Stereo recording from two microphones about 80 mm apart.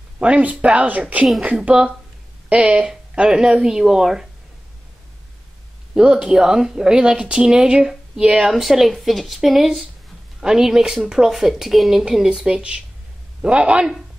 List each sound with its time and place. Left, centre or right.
0.2 s speech: centre
5.9 s speech: centre